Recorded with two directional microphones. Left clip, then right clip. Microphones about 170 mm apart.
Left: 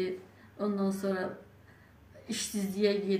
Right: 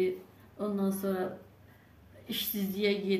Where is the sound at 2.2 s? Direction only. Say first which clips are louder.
Right 1 dB; 5° right (ahead or behind).